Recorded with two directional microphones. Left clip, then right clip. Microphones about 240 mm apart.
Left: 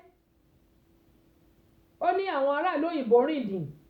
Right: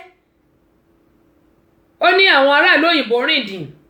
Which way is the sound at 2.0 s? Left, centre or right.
Centre.